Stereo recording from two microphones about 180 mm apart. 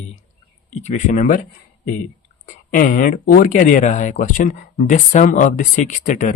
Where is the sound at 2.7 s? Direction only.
50° left (ahead or behind).